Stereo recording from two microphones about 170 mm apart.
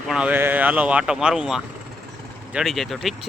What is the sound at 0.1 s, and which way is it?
Speech, 5° right (ahead or behind).